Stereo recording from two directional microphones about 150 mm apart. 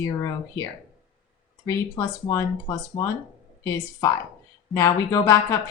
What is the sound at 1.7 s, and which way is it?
Speech, 20° left (ahead or behind).